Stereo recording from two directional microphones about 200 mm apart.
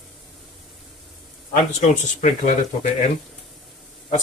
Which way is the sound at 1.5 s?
40° left (ahead or behind).